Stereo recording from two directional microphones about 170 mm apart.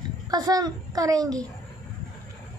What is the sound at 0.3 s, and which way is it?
A woman's voice, 20° right (ahead or behind).